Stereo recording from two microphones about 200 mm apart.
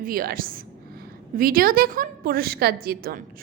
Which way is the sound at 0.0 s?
45° right (ahead or behind).